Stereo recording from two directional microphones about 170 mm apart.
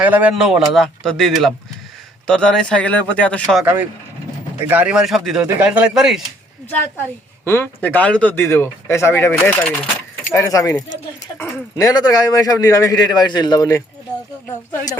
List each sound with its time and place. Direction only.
0.0 s speech: 10° right (ahead or behind); by 3.6 s 5° left (ahead or behind)
4.5 s speech: 10° right (ahead or behind)
7.4 s speech: 15° left (ahead or behind)